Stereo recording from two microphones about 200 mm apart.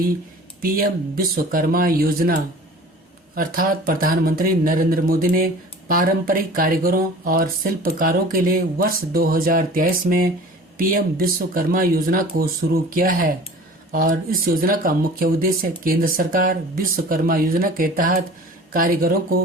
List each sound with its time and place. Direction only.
0.6 s speech: 45° right (ahead or behind)
3.3 s speech: 45° right (ahead or behind)